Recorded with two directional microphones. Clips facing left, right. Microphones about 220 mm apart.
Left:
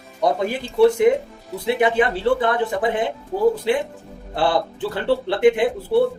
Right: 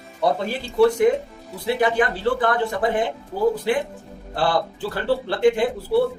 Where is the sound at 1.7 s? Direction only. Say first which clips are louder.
Left 2 dB; 20° left (ahead or behind).